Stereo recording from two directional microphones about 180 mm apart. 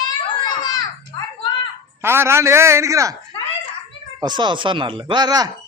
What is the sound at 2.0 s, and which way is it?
A man's voice, 15° right (ahead or behind).